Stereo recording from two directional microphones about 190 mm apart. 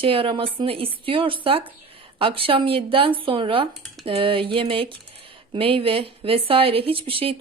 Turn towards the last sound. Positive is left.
turn(degrees=-30)  # may be behind; listen again after turning